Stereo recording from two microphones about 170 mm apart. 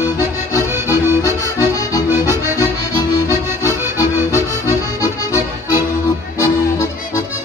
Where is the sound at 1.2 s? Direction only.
20° left (ahead or behind).